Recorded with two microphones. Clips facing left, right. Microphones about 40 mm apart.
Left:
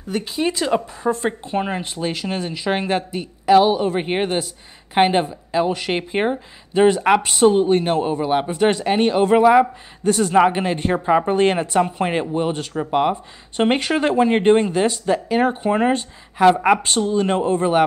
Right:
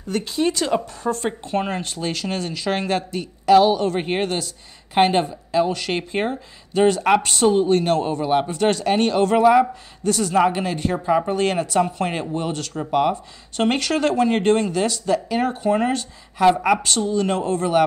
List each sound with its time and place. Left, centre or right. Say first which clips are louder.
0.1 s a woman's voice: even; centre